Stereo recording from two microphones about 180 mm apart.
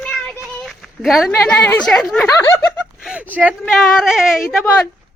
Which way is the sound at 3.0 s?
5° right (ahead or behind).